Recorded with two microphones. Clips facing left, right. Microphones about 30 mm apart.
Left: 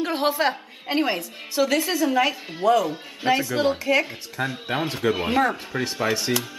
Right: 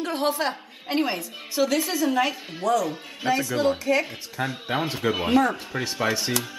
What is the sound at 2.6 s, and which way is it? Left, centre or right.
A woman's voice, left.